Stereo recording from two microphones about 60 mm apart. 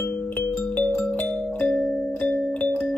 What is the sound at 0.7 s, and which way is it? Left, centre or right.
Music, left.